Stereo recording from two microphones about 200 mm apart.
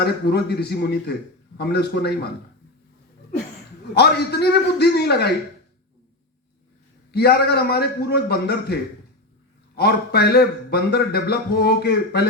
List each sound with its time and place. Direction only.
0.0 s speech: 55° left (ahead or behind)
3.9 s speech: 55° left (ahead or behind)
7.1 s a man's voice: 55° left (ahead or behind)